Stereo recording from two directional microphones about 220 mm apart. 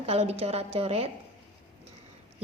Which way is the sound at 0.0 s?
25° right (ahead or behind).